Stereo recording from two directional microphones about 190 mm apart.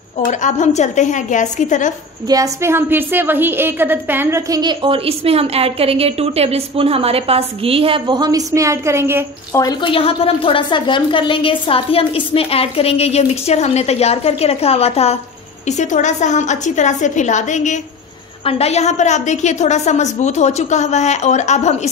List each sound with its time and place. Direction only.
0.2 s a woman's voice: 40° left (ahead or behind)
2.2 s a woman's voice: 20° right (ahead or behind)
9.5 s a woman's voice: 20° left (ahead or behind); by 21.7 s 35° left (ahead or behind)